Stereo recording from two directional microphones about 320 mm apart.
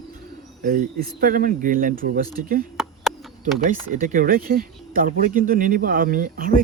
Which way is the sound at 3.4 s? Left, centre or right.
Right.